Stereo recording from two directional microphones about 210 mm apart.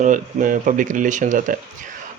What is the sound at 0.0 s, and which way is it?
Speech, 35° right (ahead or behind).